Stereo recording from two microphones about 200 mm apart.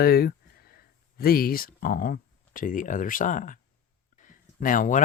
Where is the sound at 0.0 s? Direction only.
50° left (ahead or behind).